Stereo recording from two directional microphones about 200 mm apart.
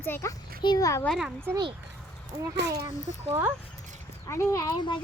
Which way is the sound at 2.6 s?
60° right (ahead or behind).